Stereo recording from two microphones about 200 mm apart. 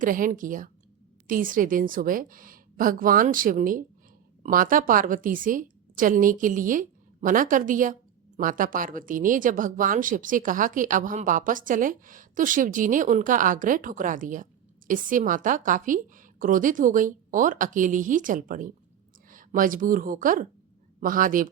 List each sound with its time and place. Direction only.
0.0 s a woman's voice: 45° right (ahead or behind)